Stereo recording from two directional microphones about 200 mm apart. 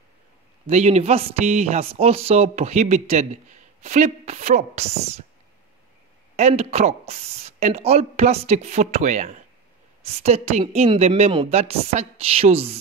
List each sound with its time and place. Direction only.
0.7 s a man's voice: 35° right (ahead or behind)
6.3 s a man's voice: 35° right (ahead or behind)